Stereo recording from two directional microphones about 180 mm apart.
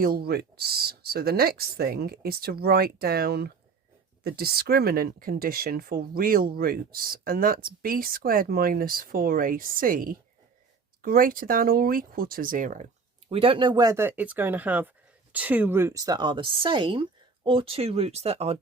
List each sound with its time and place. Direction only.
0.0 s speech: 55° right (ahead or behind)
13.3 s speech: 30° right (ahead or behind)